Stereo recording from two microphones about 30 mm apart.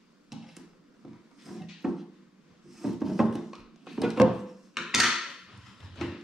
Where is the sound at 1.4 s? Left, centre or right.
Centre.